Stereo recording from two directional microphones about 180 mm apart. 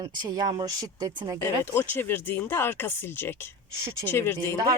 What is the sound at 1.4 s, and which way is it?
Speech, 10° left (ahead or behind).